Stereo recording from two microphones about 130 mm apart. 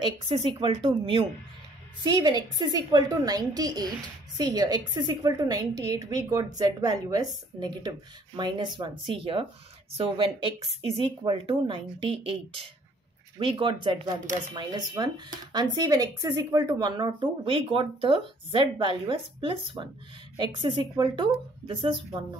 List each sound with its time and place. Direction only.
0.0 s speech: 40° right (ahead or behind)
2.0 s a woman's voice: 30° right (ahead or behind)